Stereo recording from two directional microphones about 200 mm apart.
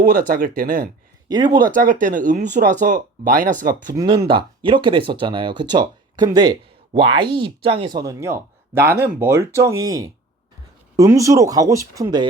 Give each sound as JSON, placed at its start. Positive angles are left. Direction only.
{"t": 0.0, "sound": "speech", "side_deg": -45}
{"t": 1.3, "sound": "speech", "side_deg": -20}
{"t": 1.7, "sound": "speech", "side_deg": -40}
{"t": 3.9, "sound": "speech", "side_deg": -20}